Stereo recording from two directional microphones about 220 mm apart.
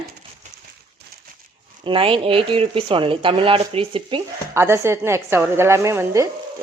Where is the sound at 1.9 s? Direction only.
25° right (ahead or behind).